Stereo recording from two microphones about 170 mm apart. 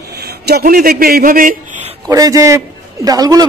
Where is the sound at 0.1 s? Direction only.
70° right (ahead or behind); by 1.8 s 55° right (ahead or behind).